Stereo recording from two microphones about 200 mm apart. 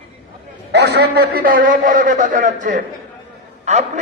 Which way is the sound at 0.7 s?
55° right (ahead or behind).